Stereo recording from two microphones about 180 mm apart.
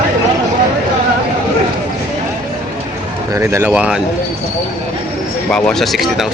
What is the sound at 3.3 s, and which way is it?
Speech, 15° right (ahead or behind).